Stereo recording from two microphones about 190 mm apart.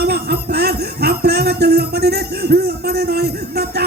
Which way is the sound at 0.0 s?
60° right (ahead or behind).